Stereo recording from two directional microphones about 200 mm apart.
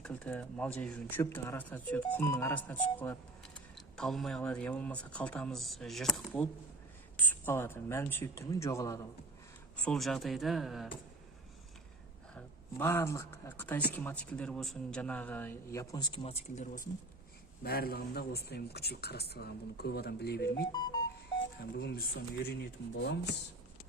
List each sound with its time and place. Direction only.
0.0 s speech: 5° left (ahead or behind)
9.7 s speech: 5° left (ahead or behind)
12.3 s speech: 10° left (ahead or behind); by 20.7 s 55° left (ahead or behind)
20.7 s music: 20° left (ahead or behind)
21.3 s a sound: 55° left (ahead or behind)
23.0 s speech: 60° left (ahead or behind)